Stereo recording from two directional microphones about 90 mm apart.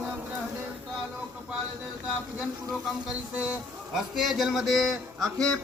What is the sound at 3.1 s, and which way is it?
A man's voice, 10° right (ahead or behind).